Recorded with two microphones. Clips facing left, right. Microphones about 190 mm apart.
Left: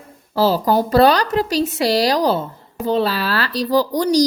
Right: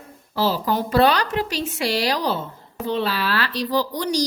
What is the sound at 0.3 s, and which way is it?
A woman's voice, 40° left (ahead or behind).